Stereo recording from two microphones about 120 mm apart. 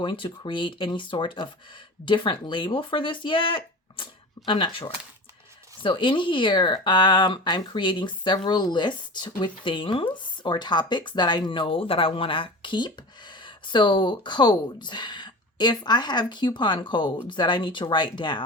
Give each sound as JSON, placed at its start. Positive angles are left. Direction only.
{"t": 0.0, "sound": "speech", "side_deg": 45}